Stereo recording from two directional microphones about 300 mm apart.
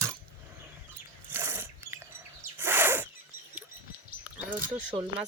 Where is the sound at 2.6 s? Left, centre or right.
Centre.